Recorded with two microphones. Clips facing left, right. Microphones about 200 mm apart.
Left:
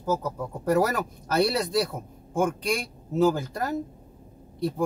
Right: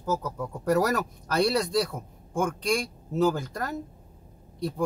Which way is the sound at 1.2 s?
5° left (ahead or behind).